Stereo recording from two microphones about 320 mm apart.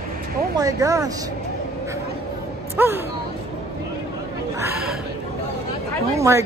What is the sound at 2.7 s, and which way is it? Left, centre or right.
Speech, centre.